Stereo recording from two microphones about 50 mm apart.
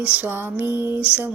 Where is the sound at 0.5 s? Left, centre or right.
Right.